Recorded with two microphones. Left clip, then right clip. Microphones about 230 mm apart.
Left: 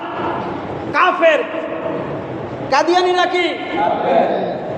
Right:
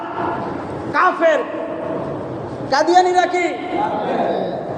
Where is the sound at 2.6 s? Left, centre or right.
Centre.